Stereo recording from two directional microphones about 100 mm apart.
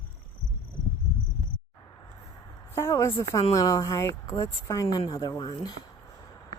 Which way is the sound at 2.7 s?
30° left (ahead or behind).